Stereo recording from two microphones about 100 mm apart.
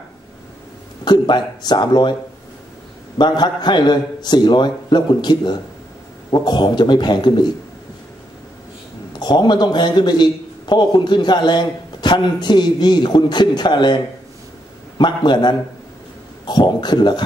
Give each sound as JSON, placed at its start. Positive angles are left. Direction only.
{"t": 1.0, "sound": "a man's voice", "side_deg": 45}
{"t": 3.2, "sound": "a man's voice", "side_deg": 45}
{"t": 9.2, "sound": "a man's voice", "side_deg": 45}